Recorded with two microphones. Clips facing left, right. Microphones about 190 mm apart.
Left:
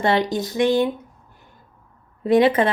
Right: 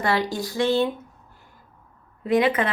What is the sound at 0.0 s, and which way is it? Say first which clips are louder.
Speech: left 4 dB; 20° left (ahead or behind).